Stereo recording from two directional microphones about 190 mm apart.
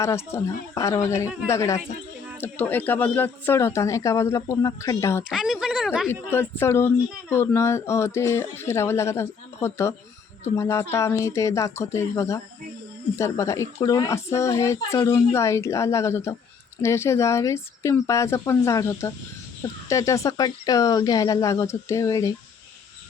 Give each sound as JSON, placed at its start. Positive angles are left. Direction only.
{"t": 0.0, "sound": "speech", "side_deg": 15}
{"t": 5.3, "sound": "speech", "side_deg": -5}
{"t": 6.3, "sound": "speech", "side_deg": 15}